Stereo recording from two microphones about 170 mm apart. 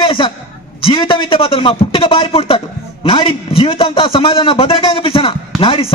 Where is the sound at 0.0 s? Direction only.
30° left (ahead or behind).